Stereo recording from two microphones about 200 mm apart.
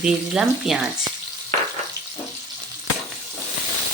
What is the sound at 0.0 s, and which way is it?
Speech, 5° right (ahead or behind).